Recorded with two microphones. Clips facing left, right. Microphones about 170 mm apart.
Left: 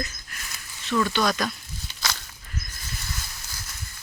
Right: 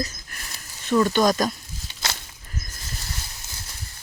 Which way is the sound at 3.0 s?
35° right (ahead or behind).